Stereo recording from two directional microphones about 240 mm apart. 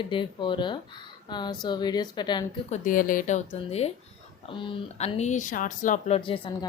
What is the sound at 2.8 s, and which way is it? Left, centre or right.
Speech, left.